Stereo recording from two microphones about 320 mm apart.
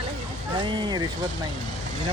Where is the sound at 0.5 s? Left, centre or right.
Centre.